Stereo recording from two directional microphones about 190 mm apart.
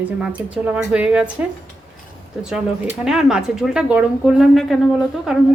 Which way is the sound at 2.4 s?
5° right (ahead or behind).